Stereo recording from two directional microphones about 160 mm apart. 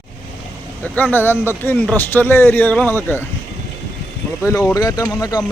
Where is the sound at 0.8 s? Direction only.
10° left (ahead or behind).